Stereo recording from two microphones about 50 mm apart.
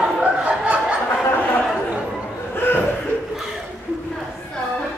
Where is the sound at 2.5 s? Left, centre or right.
Left.